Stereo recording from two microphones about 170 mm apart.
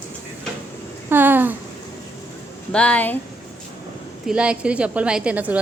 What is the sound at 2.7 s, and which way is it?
Speech, 5° left (ahead or behind).